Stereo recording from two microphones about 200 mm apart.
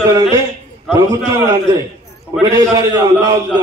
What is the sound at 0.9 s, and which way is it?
A man's voice, 15° right (ahead or behind).